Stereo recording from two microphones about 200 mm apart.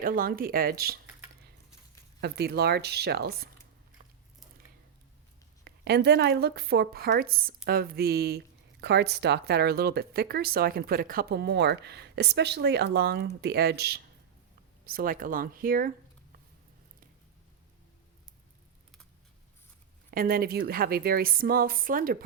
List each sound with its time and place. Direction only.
0.0 s a woman's voice: 45° right (ahead or behind)
2.2 s a woman's voice: 55° right (ahead or behind)
5.6 s a woman's voice: 55° right (ahead or behind)
20.1 s a woman's voice: 50° right (ahead or behind)